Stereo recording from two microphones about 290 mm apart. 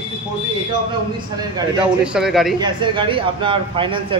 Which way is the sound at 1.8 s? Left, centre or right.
Centre.